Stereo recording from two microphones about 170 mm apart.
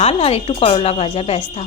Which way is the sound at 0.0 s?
35° left (ahead or behind).